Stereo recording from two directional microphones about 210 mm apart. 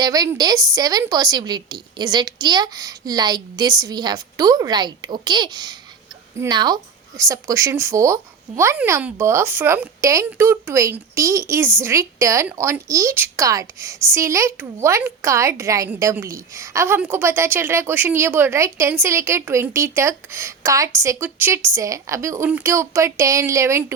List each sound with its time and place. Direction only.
0.0 s a woman's voice: 20° right (ahead or behind)